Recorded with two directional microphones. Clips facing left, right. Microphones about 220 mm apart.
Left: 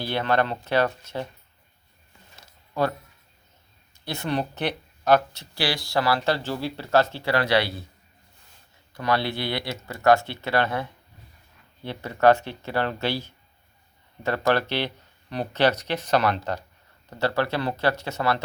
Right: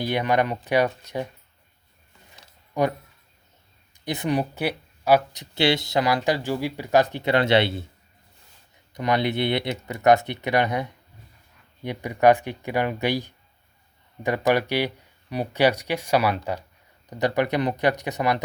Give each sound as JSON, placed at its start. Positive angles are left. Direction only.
{"t": 0.0, "sound": "speech", "side_deg": -15}
{"t": 2.8, "sound": "speech", "side_deg": -15}
{"t": 4.0, "sound": "speech", "side_deg": -15}
{"t": 8.9, "sound": "speech", "side_deg": -20}